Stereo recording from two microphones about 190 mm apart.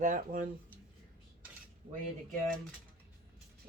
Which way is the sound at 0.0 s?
45° right (ahead or behind).